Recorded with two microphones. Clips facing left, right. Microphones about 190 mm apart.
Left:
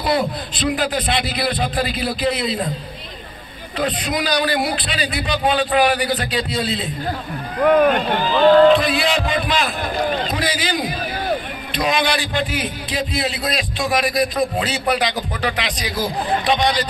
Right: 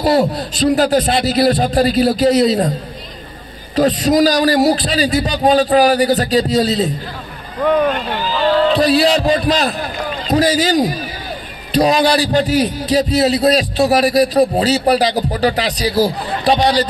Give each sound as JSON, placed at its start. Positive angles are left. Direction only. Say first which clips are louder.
{"t": 0.0, "sound": "a man's voice", "louder": "right 6 dB", "side_deg": -40}
{"t": 3.7, "sound": "a man's voice", "louder": "right 9 dB", "side_deg": -40}
{"t": 8.7, "sound": "a man's voice", "louder": "right 6 dB", "side_deg": -40}